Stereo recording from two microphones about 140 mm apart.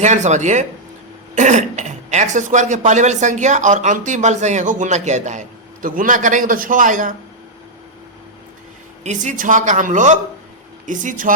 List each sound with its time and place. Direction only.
0.0 s speech: 55° right (ahead or behind)
9.0 s speech: 65° right (ahead or behind)